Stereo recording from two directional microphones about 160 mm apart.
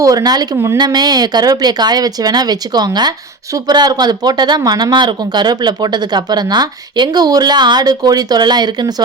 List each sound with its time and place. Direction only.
0.0 s speech: 20° right (ahead or behind)